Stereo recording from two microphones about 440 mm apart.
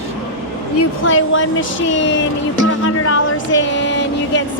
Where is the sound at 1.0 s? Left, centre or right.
Left.